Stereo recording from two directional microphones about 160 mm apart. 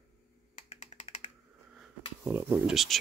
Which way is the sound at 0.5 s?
45° left (ahead or behind).